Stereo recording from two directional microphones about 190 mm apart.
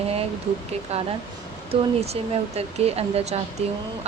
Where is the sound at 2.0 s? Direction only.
35° right (ahead or behind).